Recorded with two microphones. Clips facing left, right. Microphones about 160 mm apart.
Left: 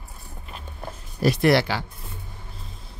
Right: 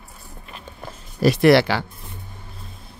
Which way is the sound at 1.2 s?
90° right.